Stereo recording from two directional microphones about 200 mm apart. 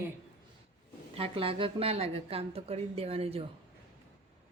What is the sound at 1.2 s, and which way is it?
A woman's voice, 25° right (ahead or behind).